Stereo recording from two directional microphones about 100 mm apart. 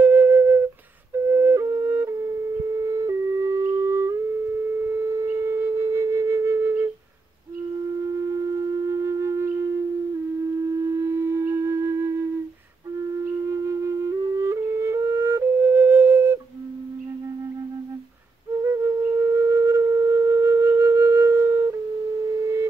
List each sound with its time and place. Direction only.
0.0 s flute: 25° right (ahead or behind)
2.8 s music: 35° right (ahead or behind)
4.9 s tuning fork: 30° right (ahead or behind)
8.4 s flute: 35° right (ahead or behind)
10.7 s flute: 30° right (ahead or behind)
13.5 s music: 30° right (ahead or behind)
18.6 s flute: 30° right (ahead or behind)
22.4 s a sound: 30° right (ahead or behind)